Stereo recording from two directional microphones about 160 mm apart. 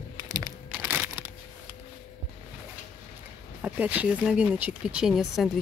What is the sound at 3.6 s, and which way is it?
Speech, 10° right (ahead or behind).